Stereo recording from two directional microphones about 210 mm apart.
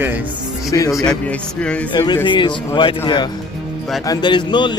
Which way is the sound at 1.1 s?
5° left (ahead or behind).